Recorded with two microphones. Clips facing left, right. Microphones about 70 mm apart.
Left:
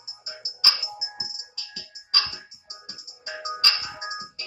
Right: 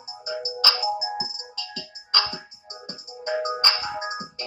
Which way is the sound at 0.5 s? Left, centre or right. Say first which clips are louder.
Right 3 dB; right.